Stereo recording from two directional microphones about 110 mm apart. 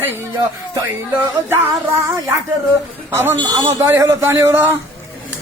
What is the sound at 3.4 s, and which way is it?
A man's voice, 35° right (ahead or behind).